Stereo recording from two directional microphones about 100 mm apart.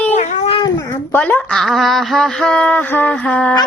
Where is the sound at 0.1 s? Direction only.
75° left (ahead or behind).